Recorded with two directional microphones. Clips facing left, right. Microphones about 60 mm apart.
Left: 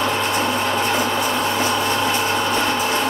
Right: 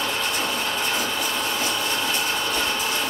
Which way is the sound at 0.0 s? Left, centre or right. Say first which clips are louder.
Left 6 dB; left.